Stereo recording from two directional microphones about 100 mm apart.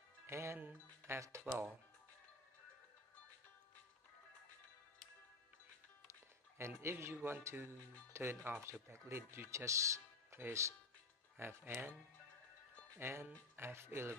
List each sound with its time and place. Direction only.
0.3 s speech: 25° right (ahead or behind)
6.8 s speech: 25° right (ahead or behind)
13.0 s speech: 25° right (ahead or behind)